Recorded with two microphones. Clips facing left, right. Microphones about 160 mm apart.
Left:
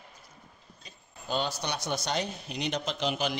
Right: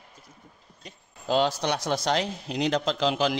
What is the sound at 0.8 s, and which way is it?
Speech, 90° right.